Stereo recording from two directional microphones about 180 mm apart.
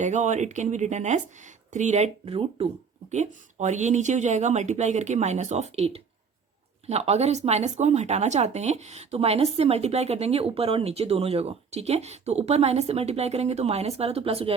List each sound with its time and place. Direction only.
0.0 s speech: 40° right (ahead or behind)